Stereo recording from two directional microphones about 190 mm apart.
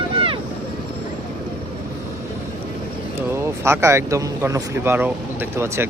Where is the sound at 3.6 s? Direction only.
15° right (ahead or behind).